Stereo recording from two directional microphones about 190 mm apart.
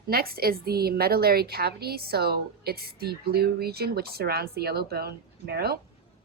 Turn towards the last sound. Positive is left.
turn(degrees=-55)  # may be behind; listen again after turning